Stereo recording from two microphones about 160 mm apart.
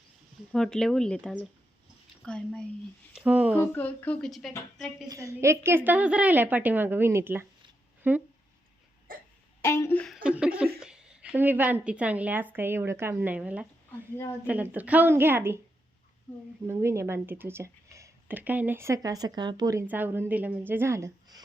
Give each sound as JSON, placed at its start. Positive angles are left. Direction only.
{"t": 0.5, "sound": "speech", "side_deg": 0}
{"t": 3.2, "sound": "speech", "side_deg": -10}
{"t": 3.6, "sound": "a woman's voice", "side_deg": 10}
{"t": 5.0, "sound": "speech", "side_deg": -20}
{"t": 9.1, "sound": "music", "side_deg": -60}
{"t": 9.6, "sound": "a woman's voice", "side_deg": 15}
{"t": 10.2, "sound": "a woman's voice", "side_deg": -5}
{"t": 16.6, "sound": "speech", "side_deg": -15}
{"t": 19.9, "sound": "speech", "side_deg": -10}